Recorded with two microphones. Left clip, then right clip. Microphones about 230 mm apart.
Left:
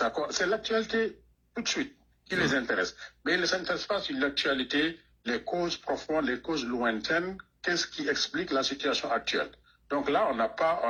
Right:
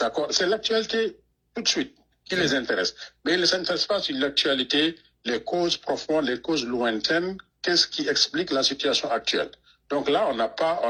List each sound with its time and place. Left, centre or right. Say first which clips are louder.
0.0 s a man's voice: right 5 dB; right